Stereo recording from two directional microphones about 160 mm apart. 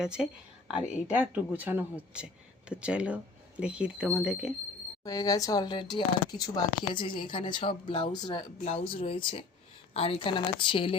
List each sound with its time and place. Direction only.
0.0 s speech: 5° right (ahead or behind)
5.0 s a woman's voice: 20° left (ahead or behind)